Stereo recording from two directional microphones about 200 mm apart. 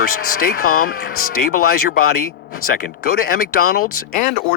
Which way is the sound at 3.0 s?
50° left (ahead or behind).